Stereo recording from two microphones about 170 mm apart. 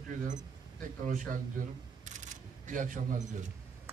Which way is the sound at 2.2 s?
50° right (ahead or behind).